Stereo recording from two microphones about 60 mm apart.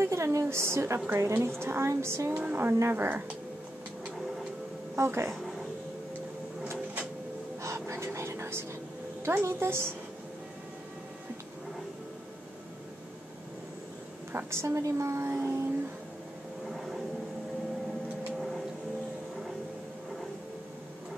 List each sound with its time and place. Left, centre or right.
0.0 s a woman's voice: right
0.9 s speech: right
1.2 s a woman's voice: right
2.5 s speech: right
4.9 s a woman's voice: right
7.8 s vehicle: right
9.2 s a woman's voice: right
14.3 s a woman's voice: right
15.2 s speech: right
16.7 s vehicle: centre